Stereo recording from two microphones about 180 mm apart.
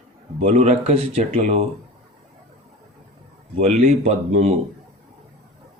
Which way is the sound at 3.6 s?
40° right (ahead or behind).